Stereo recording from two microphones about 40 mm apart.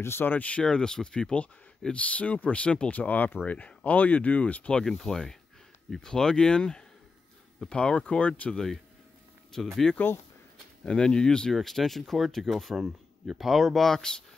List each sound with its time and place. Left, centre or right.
0.0 s speech: left
0.3 s speech: left
0.7 s speech: centre
2.0 s speech: left
3.0 s speech: left
4.7 s speech: centre; by 8.5 s left
9.5 s speech: centre
10.9 s speech: left
11.5 s speech: centre
13.7 s speech: centre